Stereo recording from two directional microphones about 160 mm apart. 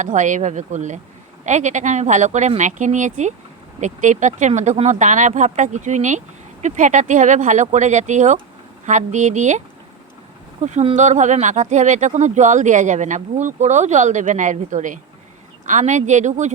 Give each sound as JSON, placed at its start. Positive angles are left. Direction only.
{"t": 0.0, "sound": "speech", "side_deg": -50}